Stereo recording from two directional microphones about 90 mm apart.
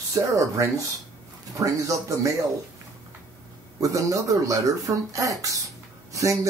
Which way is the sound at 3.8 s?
35° right (ahead or behind).